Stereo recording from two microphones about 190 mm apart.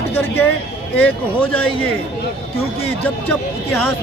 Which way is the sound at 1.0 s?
5° left (ahead or behind).